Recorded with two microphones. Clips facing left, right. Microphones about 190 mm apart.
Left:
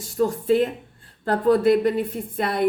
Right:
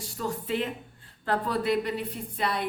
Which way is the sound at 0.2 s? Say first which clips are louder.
Left 11 dB; 45° left (ahead or behind).